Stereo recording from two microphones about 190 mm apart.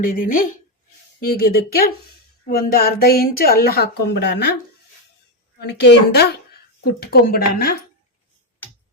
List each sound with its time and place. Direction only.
0.0 s a woman's voice: 45° left (ahead or behind); by 4.4 s 60° left (ahead or behind)
5.6 s a woman's voice: 60° left (ahead or behind)